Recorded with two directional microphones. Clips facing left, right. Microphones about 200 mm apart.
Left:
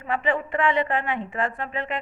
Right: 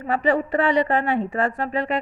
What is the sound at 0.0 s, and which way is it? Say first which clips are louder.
Speech: right 4 dB; 40° right (ahead or behind).